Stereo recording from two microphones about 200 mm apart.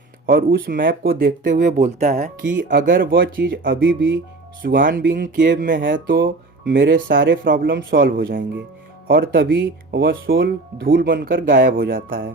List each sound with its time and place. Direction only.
0.3 s speech: 45° right (ahead or behind)
3.7 s speech: 70° right (ahead or behind)
4.6 s speech: 45° right (ahead or behind)